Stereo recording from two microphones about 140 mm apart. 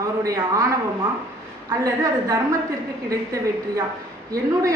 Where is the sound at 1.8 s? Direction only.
25° right (ahead or behind).